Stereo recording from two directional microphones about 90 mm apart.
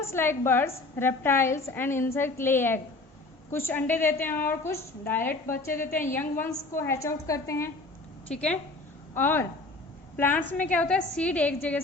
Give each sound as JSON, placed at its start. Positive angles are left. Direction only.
{"t": 0.0, "sound": "a woman's voice", "side_deg": 25}
{"t": 8.3, "sound": "a woman's voice", "side_deg": 10}
{"t": 9.1, "sound": "a woman's voice", "side_deg": 25}